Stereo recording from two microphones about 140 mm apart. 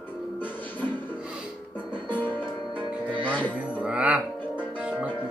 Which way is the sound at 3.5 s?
10° right (ahead or behind).